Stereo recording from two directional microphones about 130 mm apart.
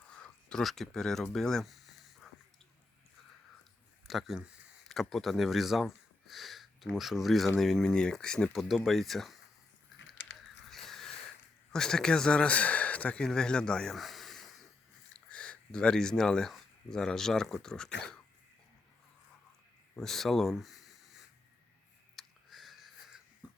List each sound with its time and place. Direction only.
0.1 s speech: 5° left (ahead or behind)
4.0 s speech: centre (ahead or behind)
10.7 s a sound: centre (ahead or behind)
11.7 s speech: 5° left (ahead or behind)
20.0 s speech: centre (ahead or behind)
22.1 s a sound: centre (ahead or behind)
23.4 s cough: 10° right (ahead or behind)